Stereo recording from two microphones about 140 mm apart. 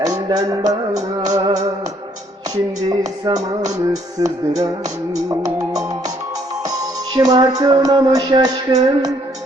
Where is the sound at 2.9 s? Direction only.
25° right (ahead or behind).